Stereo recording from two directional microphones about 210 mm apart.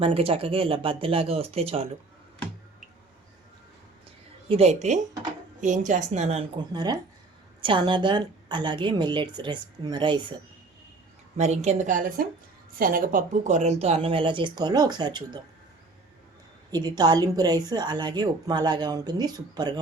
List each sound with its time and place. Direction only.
0.0 s a woman's voice: 25° right (ahead or behind)
4.4 s a woman's voice: 30° right (ahead or behind)
6.7 s a woman's voice: 20° right (ahead or behind)
11.3 s a woman's voice: 35° right (ahead or behind)
16.7 s a woman's voice: 20° right (ahead or behind)